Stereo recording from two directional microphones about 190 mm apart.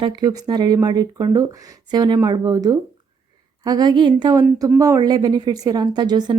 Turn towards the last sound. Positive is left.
turn(degrees=-20)  # may be behind; listen again after turning